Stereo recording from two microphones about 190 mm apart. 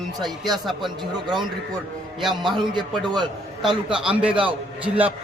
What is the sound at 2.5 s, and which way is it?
Speech, 25° right (ahead or behind).